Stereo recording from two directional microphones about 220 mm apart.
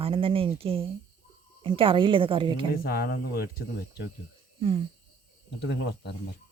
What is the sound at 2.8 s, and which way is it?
Speech, 45° left (ahead or behind).